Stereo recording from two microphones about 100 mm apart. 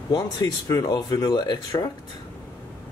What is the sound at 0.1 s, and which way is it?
Speech, 40° left (ahead or behind).